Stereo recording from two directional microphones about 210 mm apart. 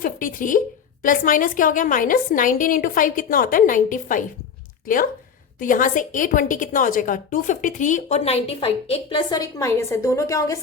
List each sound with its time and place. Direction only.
0.0 s a woman's voice: 40° left (ahead or behind)
5.5 s a woman's voice: 40° left (ahead or behind); by 10.6 s 15° left (ahead or behind)